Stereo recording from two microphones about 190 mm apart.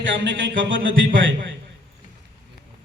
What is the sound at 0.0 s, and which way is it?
A man's voice, 75° right (ahead or behind).